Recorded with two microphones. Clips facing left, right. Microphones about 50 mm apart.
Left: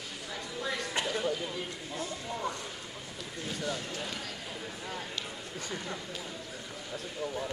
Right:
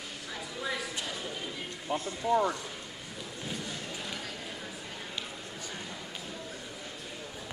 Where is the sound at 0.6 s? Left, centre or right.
Centre.